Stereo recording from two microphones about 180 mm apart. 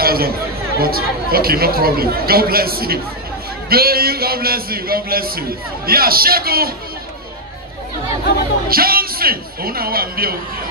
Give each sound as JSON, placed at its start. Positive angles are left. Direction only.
{"t": 0.0, "sound": "chatter", "side_deg": -55}
{"t": 0.7, "sound": "speech", "side_deg": -55}
{"t": 8.6, "sound": "speech", "side_deg": -55}